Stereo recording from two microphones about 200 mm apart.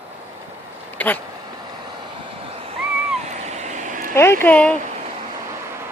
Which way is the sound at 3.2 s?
35° right (ahead or behind).